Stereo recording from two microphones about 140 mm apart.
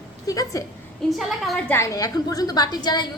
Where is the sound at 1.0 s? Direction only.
Centre (ahead or behind).